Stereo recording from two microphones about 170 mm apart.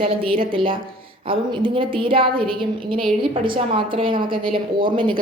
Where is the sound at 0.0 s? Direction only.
35° right (ahead or behind).